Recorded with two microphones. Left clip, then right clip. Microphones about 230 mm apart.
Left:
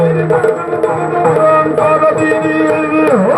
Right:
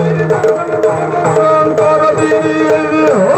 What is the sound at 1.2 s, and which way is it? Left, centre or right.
Music, right.